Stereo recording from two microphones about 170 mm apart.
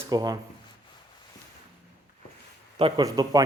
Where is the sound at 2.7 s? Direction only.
30° right (ahead or behind).